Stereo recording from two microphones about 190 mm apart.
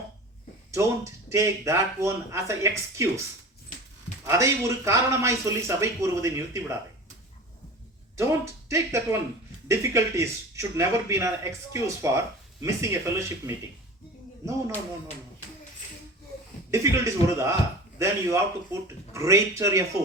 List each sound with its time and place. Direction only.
0.7 s speech: 15° right (ahead or behind)
4.3 s speech: 15° right (ahead or behind)
8.1 s speech: 15° right (ahead or behind)
16.7 s speech: 15° right (ahead or behind)